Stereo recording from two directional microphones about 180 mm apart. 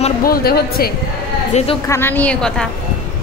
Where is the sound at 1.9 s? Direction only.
10° left (ahead or behind).